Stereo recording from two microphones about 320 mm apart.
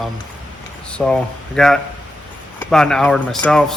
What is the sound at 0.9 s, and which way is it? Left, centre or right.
Speech, centre.